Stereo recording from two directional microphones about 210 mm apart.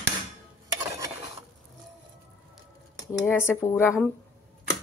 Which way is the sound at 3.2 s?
10° left (ahead or behind).